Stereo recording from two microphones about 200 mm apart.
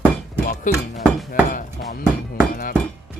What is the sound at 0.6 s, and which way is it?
Music, 40° left (ahead or behind).